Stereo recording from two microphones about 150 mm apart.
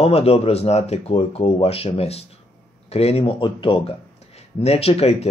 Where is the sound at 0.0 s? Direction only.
40° left (ahead or behind).